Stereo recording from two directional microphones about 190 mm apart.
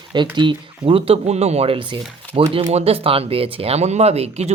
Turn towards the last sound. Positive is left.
turn(degrees=-35)  # may be behind; listen again after turning